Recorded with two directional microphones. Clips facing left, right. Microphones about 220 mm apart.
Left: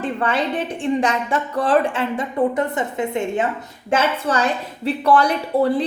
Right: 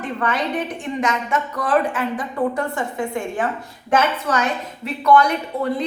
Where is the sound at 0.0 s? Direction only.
30° left (ahead or behind).